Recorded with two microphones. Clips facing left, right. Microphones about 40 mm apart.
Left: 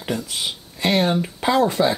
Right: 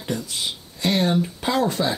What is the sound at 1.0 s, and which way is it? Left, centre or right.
Speech, left.